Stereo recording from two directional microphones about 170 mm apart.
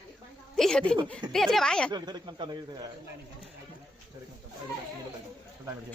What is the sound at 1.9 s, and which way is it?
Speech, 25° right (ahead or behind).